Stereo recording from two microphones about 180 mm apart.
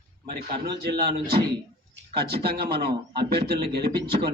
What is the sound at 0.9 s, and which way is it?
Speech, 60° right (ahead or behind).